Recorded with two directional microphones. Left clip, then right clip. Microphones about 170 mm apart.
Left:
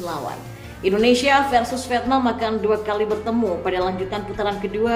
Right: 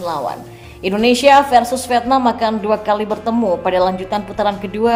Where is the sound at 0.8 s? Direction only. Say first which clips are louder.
Right 4 dB; 25° right (ahead or behind).